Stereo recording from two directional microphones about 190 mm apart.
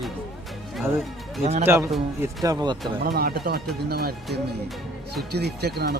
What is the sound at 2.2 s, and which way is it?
Speech, 15° right (ahead or behind).